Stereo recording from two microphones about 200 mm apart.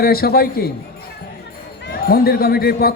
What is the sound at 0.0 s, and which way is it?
Speech, 50° left (ahead or behind).